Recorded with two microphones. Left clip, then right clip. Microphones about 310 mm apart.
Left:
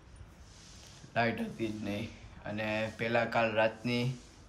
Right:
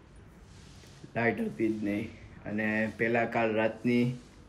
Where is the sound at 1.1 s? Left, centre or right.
Centre.